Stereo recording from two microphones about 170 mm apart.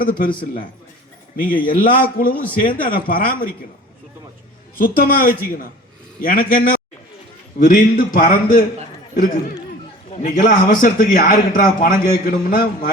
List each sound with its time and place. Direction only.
0.0 s a man's voice: 55° left (ahead or behind)
1.4 s a man's voice: 55° left (ahead or behind)
4.8 s a man's voice: 55° left (ahead or behind)